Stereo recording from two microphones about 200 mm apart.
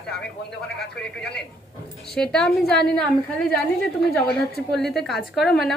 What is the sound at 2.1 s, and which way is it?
Speech, 5° left (ahead or behind).